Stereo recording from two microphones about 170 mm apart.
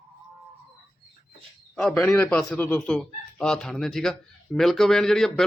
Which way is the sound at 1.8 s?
5° left (ahead or behind).